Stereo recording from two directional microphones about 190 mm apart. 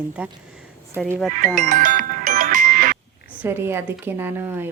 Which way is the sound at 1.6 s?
45° right (ahead or behind).